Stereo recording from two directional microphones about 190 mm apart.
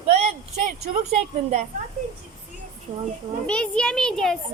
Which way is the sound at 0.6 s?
35° right (ahead or behind).